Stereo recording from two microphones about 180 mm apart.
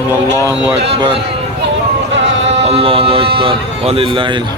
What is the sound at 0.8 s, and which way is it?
Speech, 35° right (ahead or behind).